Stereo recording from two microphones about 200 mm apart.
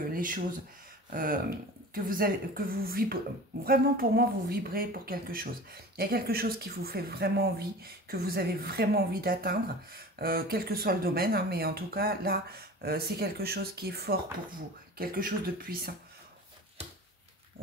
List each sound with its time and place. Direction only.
0.1 s speech: 45° right (ahead or behind)